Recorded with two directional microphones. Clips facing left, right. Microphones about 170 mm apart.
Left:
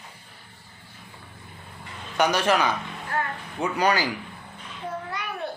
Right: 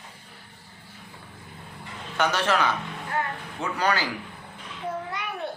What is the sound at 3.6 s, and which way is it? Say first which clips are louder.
Speech: left 3 dB; 15° left (ahead or behind).